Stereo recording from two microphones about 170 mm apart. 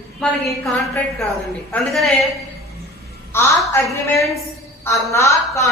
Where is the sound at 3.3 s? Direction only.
15° left (ahead or behind).